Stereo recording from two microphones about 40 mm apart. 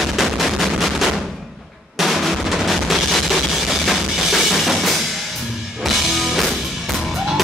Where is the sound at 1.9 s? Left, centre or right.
Centre.